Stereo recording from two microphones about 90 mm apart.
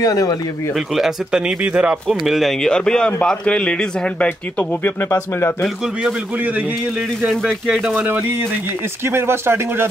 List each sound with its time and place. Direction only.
0.0 s speech: 40° left (ahead or behind)
0.7 s speech: 5° right (ahead or behind)
2.0 s speech: centre (ahead or behind)
5.1 s speech: 25° left (ahead or behind)
7.2 s speech: 10° right (ahead or behind)
8.1 s speech: 25° right (ahead or behind)